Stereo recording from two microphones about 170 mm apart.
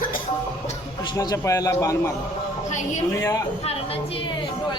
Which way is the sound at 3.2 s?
20° left (ahead or behind).